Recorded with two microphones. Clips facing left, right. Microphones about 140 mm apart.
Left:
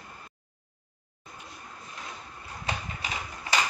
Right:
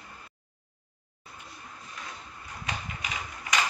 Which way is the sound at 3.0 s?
30° left (ahead or behind).